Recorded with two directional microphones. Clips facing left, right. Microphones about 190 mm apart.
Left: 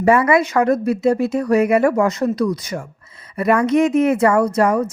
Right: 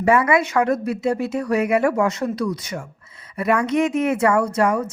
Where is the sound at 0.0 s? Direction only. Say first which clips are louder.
Left 3 dB; 40° left (ahead or behind).